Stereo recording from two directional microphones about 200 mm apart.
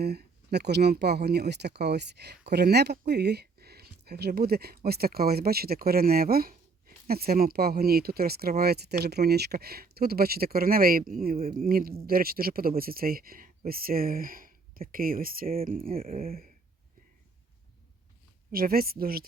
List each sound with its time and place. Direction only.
0.0 s speech: 55° right (ahead or behind)
18.5 s speech: 45° right (ahead or behind)